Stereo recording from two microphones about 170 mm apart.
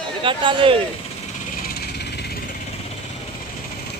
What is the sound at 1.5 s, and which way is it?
Vehicle, 65° left (ahead or behind).